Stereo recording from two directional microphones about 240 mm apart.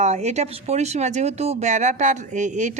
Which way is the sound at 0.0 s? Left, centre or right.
Right.